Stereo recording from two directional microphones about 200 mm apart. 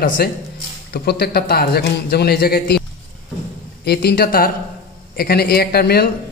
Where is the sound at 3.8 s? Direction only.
55° left (ahead or behind).